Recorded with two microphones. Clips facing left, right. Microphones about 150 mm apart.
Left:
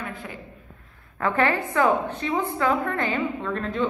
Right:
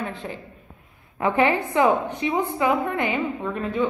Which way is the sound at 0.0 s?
25° right (ahead or behind).